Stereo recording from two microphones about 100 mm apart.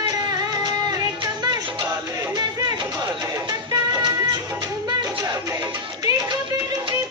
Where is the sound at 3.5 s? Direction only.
45° right (ahead or behind).